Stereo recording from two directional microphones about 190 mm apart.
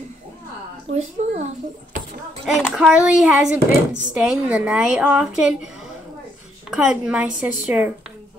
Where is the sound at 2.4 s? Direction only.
Centre (ahead or behind).